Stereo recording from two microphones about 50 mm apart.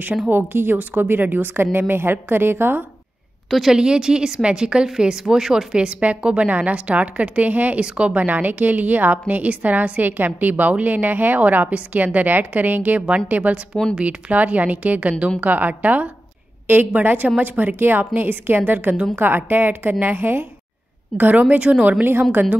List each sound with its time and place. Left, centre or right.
0.5 s a woman's voice: right
3.4 s a woman's voice: centre
3.7 s a woman's voice: centre; by 20.4 s right
21.2 s a woman's voice: right